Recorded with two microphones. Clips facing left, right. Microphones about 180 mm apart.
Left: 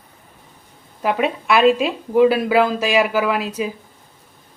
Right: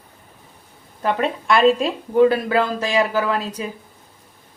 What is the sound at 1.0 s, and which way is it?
A woman's voice, 10° left (ahead or behind).